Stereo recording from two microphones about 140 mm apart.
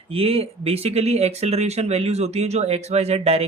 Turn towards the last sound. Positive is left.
turn(degrees=-50)  # may be behind; listen again after turning